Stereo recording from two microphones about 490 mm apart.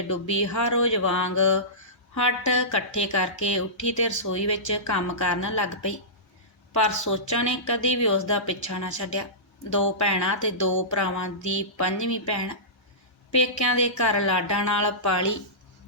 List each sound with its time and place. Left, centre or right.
0.1 s speech: left